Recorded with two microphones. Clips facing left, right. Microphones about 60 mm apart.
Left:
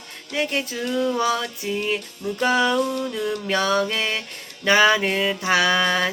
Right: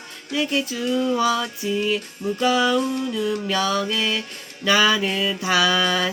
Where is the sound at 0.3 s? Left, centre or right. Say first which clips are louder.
Right 1 dB; left.